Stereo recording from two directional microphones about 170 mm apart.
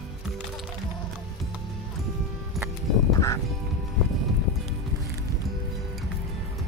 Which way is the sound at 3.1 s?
20° left (ahead or behind).